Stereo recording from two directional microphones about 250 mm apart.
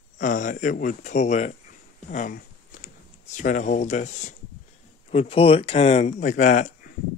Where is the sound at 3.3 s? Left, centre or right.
Left.